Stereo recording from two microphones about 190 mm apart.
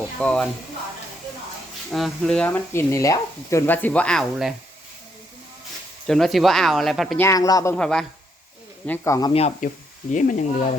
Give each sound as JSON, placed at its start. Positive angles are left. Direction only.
{"t": 0.2, "sound": "speech", "side_deg": 5}
{"t": 1.9, "sound": "speech", "side_deg": 0}
{"t": 6.1, "sound": "speech", "side_deg": 0}
{"t": 7.2, "sound": "speech", "side_deg": 15}
{"t": 7.8, "sound": "speech", "side_deg": 5}
{"t": 8.9, "sound": "speech", "side_deg": 15}
{"t": 9.3, "sound": "speech", "side_deg": 40}